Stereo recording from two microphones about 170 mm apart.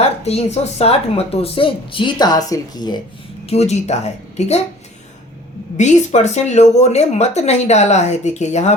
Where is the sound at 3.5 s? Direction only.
40° left (ahead or behind).